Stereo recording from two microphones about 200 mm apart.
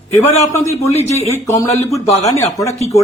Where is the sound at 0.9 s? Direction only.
30° left (ahead or behind).